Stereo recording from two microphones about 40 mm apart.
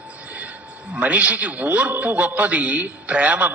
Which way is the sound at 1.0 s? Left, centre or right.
Right.